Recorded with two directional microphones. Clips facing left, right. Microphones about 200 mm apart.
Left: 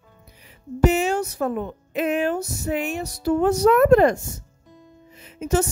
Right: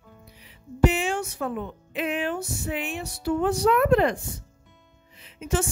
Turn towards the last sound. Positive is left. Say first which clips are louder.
# left 5 dB
turn(degrees=40)  # may be behind; listen again after turning